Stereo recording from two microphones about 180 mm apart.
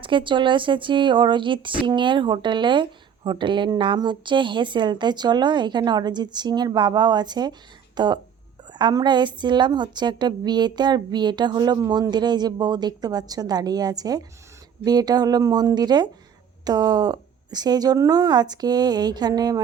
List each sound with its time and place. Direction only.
0.0 s a woman's voice: 25° right (ahead or behind)